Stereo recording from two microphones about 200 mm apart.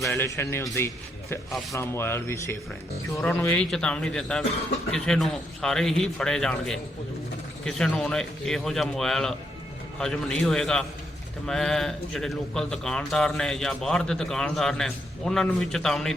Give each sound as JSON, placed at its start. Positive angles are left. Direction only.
{"t": 0.0, "sound": "speech", "side_deg": 15}